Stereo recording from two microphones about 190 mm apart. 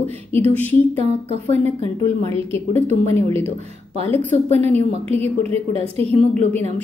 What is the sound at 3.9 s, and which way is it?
A woman's voice, 30° right (ahead or behind).